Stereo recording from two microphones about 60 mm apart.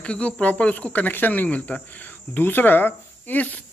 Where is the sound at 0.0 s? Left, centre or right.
Left.